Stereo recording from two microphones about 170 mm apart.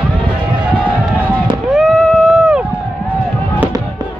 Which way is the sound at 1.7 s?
Centre (ahead or behind).